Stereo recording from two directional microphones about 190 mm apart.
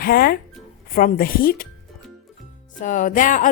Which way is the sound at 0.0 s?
50° left (ahead or behind).